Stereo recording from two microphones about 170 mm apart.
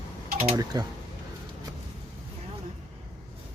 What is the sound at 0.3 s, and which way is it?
Speech, 20° right (ahead or behind).